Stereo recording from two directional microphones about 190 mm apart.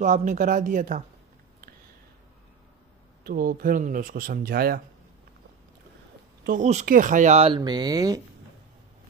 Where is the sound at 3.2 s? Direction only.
50° right (ahead or behind).